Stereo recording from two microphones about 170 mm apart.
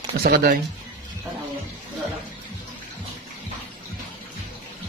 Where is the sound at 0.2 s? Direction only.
65° right (ahead or behind).